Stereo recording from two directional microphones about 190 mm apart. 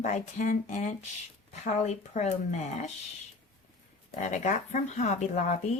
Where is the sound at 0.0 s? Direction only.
40° left (ahead or behind).